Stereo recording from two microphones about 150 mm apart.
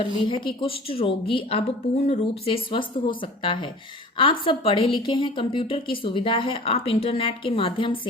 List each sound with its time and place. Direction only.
0.2 s speech: 35° left (ahead or behind)